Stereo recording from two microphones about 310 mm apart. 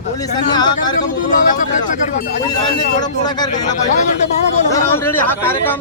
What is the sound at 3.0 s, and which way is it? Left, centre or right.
Speech, centre.